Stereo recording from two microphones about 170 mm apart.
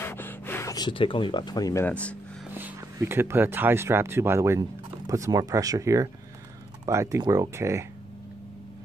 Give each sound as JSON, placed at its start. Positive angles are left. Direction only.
{"t": 0.0, "sound": "speech", "side_deg": 15}
{"t": 2.5, "sound": "speech", "side_deg": -10}